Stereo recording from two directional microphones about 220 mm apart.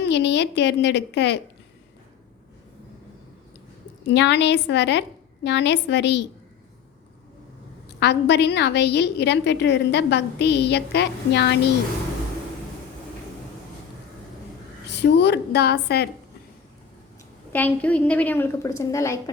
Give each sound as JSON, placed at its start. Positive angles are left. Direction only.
{"t": 0.0, "sound": "a woman's voice", "side_deg": 50}
{"t": 4.0, "sound": "a woman's voice", "side_deg": 50}
{"t": 7.9, "sound": "a woman's voice", "side_deg": 50}
{"t": 14.8, "sound": "a woman's voice", "side_deg": 50}
{"t": 17.5, "sound": "a woman's voice", "side_deg": 5}